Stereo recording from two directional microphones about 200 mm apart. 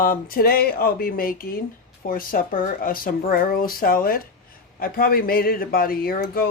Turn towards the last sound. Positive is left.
turn(degrees=50)  # may be behind; listen again after turning